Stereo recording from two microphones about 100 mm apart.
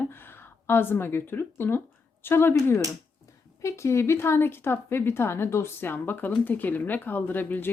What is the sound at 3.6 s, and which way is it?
A woman's voice, 30° left (ahead or behind).